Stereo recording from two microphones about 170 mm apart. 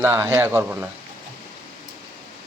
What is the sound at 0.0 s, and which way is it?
Speech, 15° right (ahead or behind).